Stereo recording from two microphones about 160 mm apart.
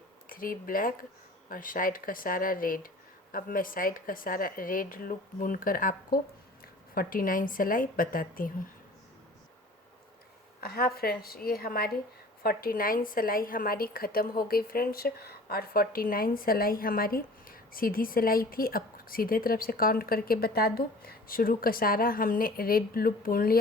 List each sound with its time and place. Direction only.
0.3 s a woman's voice: 60° left (ahead or behind)
10.7 s a woman's voice: 70° left (ahead or behind)